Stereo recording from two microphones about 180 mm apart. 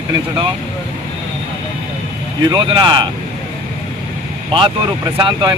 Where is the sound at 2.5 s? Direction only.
25° right (ahead or behind).